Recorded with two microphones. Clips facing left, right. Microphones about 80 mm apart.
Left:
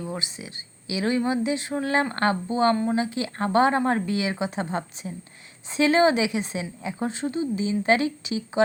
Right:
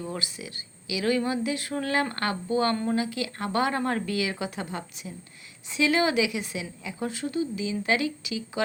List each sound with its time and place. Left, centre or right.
0.0 s a woman's voice: centre